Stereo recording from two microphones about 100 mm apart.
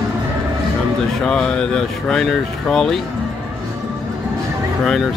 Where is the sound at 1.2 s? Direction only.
10° left (ahead or behind).